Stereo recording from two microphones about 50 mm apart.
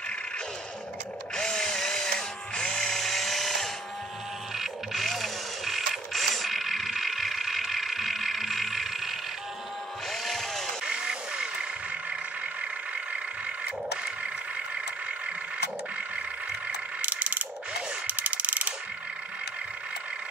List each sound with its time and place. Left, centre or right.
1.3 s drill: centre
4.6 s vehicle: centre
10.2 s a sound: centre
10.9 s music: centre
17.0 s mechanisms: right
18.0 s a sound: right